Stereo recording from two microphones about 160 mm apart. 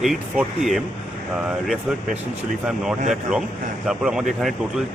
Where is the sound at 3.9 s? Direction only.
5° right (ahead or behind).